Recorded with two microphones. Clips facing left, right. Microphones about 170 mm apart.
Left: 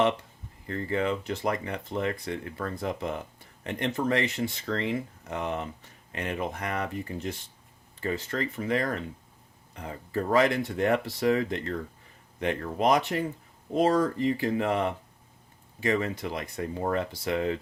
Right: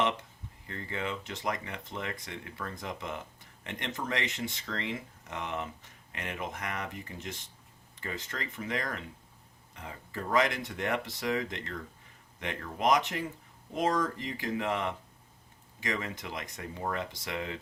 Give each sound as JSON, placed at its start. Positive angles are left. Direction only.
{"t": 0.7, "sound": "speech", "side_deg": 40}